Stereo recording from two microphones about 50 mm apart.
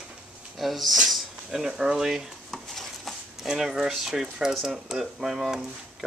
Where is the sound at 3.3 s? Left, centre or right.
Centre.